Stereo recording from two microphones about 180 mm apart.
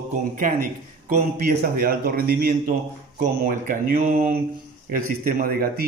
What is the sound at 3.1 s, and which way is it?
Speech, 45° right (ahead or behind).